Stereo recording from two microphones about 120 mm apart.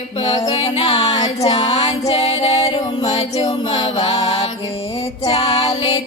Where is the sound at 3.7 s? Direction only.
50° left (ahead or behind).